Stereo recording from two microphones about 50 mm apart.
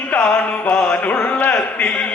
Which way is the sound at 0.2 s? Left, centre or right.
Centre.